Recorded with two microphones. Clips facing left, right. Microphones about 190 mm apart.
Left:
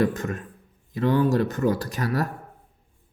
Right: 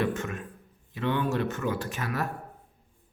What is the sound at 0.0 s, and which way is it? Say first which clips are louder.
Speech: left 5 dB; 40° left (ahead or behind).